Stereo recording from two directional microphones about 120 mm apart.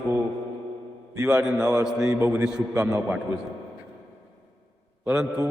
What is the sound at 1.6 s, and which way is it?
A man's voice, 15° right (ahead or behind).